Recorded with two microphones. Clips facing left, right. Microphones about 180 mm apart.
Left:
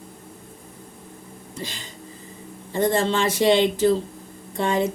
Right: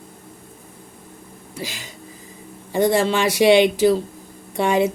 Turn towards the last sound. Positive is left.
turn(degrees=-10)  # may be behind; listen again after turning